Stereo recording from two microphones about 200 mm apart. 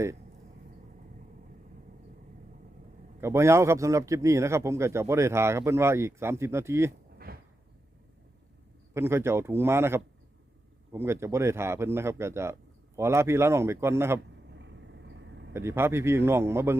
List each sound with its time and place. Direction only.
3.2 s a man's voice: 15° right (ahead or behind)
7.3 s cupboard open or close: 45° right (ahead or behind)
8.9 s a man's voice: 15° right (ahead or behind)
14.5 s vehicle: 60° right (ahead or behind)
15.5 s a man's voice: 10° right (ahead or behind)